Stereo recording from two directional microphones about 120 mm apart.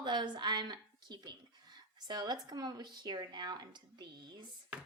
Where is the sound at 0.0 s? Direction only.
40° right (ahead or behind).